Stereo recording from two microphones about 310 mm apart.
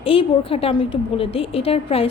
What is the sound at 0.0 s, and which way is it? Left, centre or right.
A woman's voice, centre.